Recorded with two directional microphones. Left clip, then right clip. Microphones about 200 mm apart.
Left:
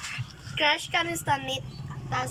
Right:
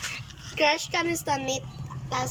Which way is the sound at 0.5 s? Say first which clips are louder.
Right 1 dB; 25° right (ahead or behind).